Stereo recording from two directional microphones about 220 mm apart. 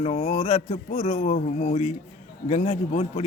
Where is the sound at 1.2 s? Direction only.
35° left (ahead or behind).